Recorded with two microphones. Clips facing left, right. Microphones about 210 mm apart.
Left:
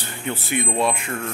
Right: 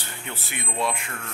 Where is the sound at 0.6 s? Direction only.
50° left (ahead or behind).